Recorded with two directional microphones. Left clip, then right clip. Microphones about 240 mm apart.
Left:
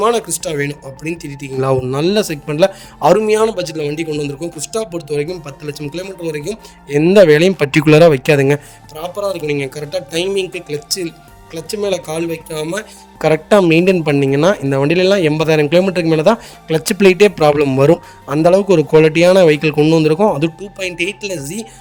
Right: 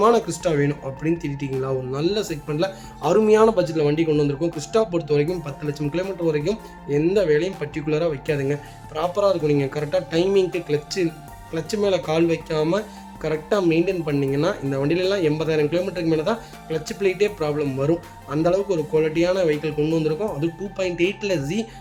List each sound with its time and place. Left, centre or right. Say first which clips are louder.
0.0 s speech: left 3 dB; left
4.7 s speech: right 1 dB; centre
5.0 s speech: left 2 dB; left
9.0 s speech: even; centre
9.7 s speech: left 2 dB; left
11.9 s speech: even; centre
13.2 s speech: left 10 dB; left